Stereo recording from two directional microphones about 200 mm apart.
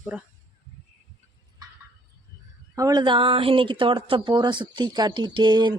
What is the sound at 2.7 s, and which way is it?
Speech, 20° right (ahead or behind).